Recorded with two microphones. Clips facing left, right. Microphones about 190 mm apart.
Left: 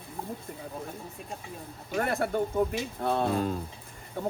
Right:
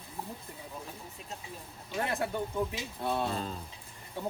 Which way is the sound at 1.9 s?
55° left (ahead or behind).